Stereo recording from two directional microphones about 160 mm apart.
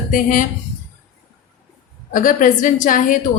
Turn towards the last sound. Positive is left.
turn(degrees=55)  # may be behind; listen again after turning